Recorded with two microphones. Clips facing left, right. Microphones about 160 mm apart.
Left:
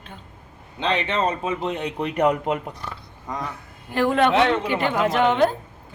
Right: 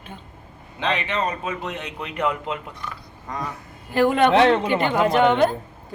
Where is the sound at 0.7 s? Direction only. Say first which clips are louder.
Left 1 dB; 30° left (ahead or behind).